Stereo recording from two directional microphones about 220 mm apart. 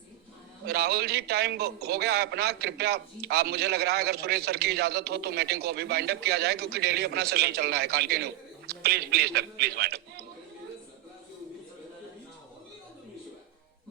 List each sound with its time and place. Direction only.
0.6 s a man's voice: 45° right (ahead or behind)